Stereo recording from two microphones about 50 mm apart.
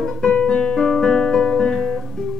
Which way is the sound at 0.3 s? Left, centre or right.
Centre.